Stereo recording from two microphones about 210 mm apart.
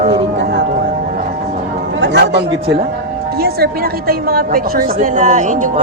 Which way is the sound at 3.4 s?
45° right (ahead or behind).